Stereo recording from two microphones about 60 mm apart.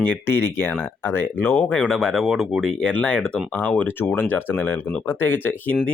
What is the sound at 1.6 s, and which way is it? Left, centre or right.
Speech, centre.